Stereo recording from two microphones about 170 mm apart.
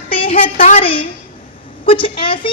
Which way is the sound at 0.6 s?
50° left (ahead or behind).